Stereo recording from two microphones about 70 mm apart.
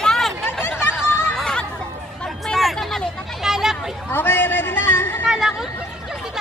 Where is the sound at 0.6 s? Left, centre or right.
Left.